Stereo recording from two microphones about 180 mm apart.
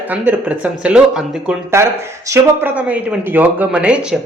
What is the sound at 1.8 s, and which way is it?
Speech, 15° right (ahead or behind).